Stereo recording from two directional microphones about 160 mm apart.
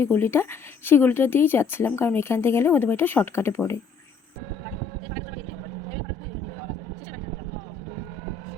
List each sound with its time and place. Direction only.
0.0 s speech: 15° left (ahead or behind)